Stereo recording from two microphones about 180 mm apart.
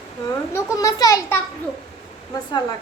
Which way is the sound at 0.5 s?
20° left (ahead or behind).